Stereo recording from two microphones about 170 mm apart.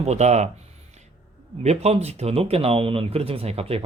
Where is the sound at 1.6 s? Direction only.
40° right (ahead or behind).